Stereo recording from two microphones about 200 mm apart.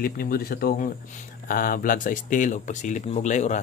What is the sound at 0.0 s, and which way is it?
Speech, 45° left (ahead or behind).